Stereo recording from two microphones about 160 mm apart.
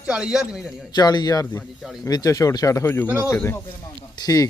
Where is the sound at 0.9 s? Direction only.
25° left (ahead or behind).